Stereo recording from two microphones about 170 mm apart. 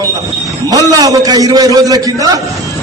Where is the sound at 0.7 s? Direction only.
20° right (ahead or behind).